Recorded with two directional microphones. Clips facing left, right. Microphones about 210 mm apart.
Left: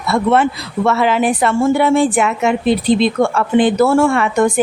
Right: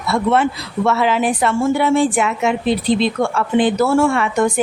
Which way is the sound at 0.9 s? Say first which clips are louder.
Left 2 dB; 55° left (ahead or behind).